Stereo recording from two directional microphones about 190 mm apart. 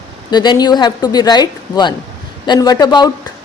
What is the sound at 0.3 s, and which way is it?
A woman's voice, 20° left (ahead or behind).